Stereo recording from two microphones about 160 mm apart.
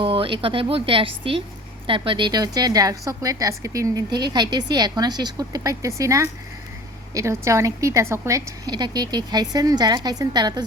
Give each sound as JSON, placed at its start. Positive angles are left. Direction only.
{"t": 0.0, "sound": "a woman's voice", "side_deg": -35}